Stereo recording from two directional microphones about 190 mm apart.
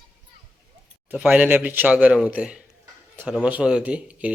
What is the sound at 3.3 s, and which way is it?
A man's voice, 5° right (ahead or behind).